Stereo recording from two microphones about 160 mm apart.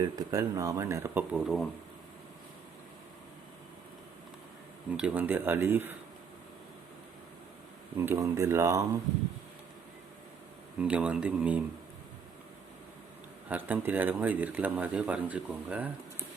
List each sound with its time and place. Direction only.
0.2 s speech: 20° right (ahead or behind); by 1.6 s 5° right (ahead or behind)
4.9 s speech: 10° right (ahead or behind)
7.9 s speech: 15° right (ahead or behind)
10.8 s speech: 5° right (ahead or behind)
13.5 s speech: 10° right (ahead or behind)